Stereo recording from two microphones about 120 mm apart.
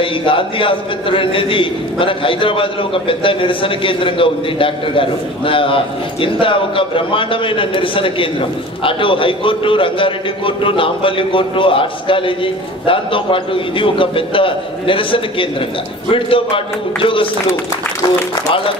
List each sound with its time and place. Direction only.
0.0 s a man's voice: 45° left (ahead or behind)